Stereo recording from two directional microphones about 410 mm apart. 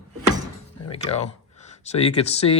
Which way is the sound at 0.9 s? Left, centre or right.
Centre.